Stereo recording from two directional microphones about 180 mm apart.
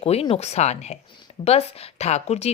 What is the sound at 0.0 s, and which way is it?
Speech, 35° left (ahead or behind).